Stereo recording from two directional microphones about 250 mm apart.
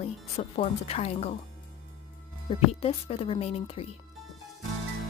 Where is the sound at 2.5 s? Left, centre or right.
Left.